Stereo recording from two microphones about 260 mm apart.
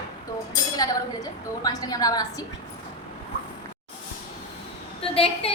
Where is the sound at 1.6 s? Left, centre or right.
Centre.